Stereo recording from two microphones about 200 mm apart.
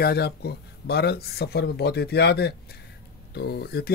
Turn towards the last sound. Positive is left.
turn(degrees=50)  # may be behind; listen again after turning